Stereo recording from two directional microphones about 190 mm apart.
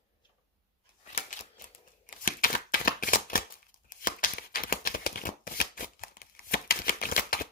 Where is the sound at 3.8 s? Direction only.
45° left (ahead or behind).